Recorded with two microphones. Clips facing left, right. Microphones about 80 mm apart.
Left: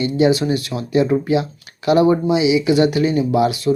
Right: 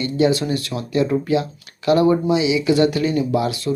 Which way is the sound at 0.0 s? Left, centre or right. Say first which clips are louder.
Left 2 dB; centre.